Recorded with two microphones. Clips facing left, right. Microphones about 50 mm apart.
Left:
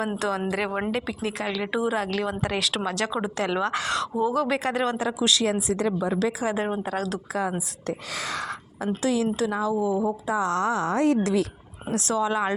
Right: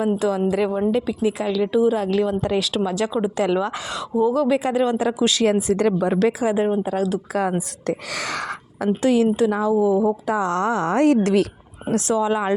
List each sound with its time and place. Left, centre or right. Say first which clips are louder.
0.2 s speech: right 6 dB; centre
4.9 s speech: right 4 dB; right
6.4 s speech: right 6 dB; centre
6.7 s speech: right 6 dB; centre
7.9 s speech: right 4 dB; right
9.0 s speech: right 7 dB; right
10.8 s a woman's voice: right 8 dB; right
11.9 s speech: right 4 dB; right